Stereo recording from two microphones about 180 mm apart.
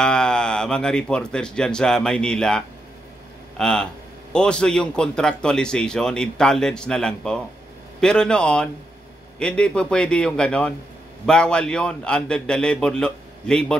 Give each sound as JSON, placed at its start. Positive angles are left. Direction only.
{"t": 0.0, "sound": "a man's voice", "side_deg": 5}